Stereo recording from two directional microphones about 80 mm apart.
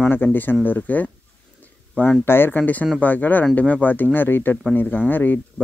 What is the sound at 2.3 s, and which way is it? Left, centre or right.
Speech, left.